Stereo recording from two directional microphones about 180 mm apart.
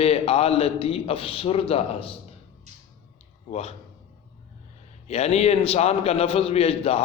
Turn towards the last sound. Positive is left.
turn(degrees=35)  # may be behind; listen again after turning